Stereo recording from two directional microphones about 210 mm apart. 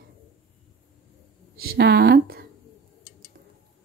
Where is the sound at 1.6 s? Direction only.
45° right (ahead or behind).